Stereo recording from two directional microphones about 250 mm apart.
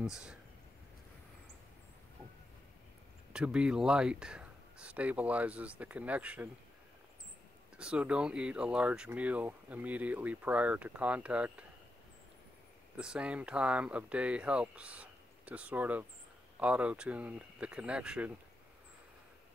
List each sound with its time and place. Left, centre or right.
0.0 s speech: centre
3.3 s speech: centre
7.7 s speech: centre
12.9 s speech: centre